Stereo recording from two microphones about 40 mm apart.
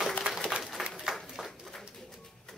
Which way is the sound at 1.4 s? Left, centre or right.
Centre.